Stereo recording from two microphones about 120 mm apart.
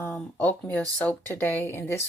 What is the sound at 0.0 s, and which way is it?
Speech, 15° left (ahead or behind).